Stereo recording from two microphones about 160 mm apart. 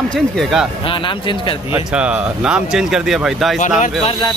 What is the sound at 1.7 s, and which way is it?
Speech, 10° right (ahead or behind).